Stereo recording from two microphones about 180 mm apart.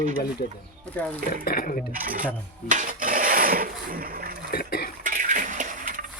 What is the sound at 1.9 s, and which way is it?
Speech, 50° right (ahead or behind).